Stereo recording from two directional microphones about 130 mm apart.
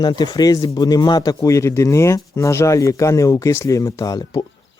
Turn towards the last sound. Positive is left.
turn(degrees=30)  # may be behind; listen again after turning